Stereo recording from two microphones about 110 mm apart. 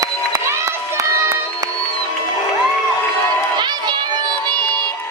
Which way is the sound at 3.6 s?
45° right (ahead or behind).